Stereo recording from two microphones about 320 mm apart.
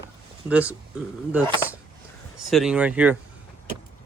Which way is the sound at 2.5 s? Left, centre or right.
Centre.